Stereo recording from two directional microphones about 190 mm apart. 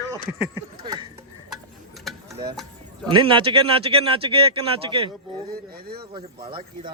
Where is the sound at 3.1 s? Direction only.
25° right (ahead or behind).